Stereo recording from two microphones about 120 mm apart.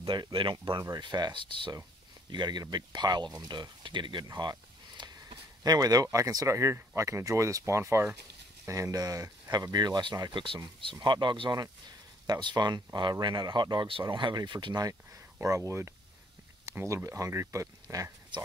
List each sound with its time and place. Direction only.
0.0 s speech: 45° right (ahead or behind); by 18.1 s 25° right (ahead or behind)